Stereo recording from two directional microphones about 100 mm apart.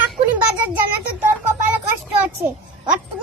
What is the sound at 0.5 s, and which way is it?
Child singing, 15° right (ahead or behind).